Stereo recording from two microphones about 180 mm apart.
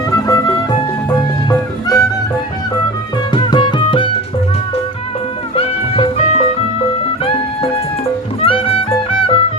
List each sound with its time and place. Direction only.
0.1 s music: 15° left (ahead or behind)
3.3 s music: 25° left (ahead or behind)
5.5 s music: 35° left (ahead or behind)
8.4 s music: 30° left (ahead or behind)